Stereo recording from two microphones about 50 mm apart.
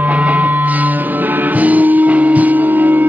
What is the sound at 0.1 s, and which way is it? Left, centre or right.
Music, right.